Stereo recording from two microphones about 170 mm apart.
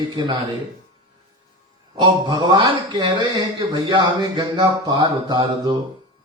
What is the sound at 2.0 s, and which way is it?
Speech, 25° right (ahead or behind).